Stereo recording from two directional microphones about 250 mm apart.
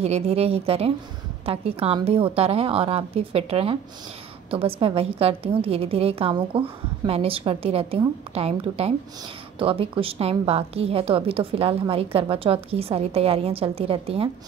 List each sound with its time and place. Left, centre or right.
0.0 s a woman's voice: right